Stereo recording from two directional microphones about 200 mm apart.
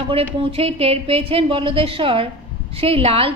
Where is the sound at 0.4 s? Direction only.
30° right (ahead or behind).